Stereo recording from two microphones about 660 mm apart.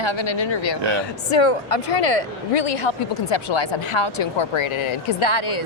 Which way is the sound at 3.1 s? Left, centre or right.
Left.